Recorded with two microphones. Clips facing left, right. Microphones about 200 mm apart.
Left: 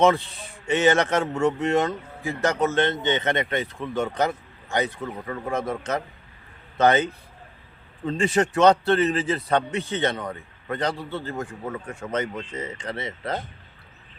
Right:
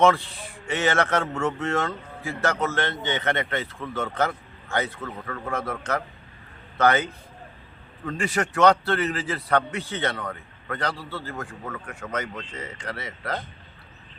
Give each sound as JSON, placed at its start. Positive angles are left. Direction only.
{"t": 0.0, "sound": "a man's voice", "side_deg": 20}